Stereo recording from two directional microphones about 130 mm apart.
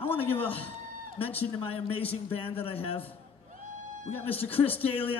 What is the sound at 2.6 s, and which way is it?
Speech, 45° left (ahead or behind).